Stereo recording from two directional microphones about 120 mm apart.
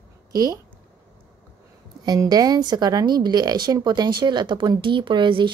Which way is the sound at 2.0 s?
35° right (ahead or behind).